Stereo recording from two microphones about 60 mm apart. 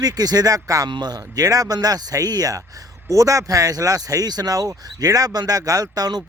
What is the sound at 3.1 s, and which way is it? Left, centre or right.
Speech, right.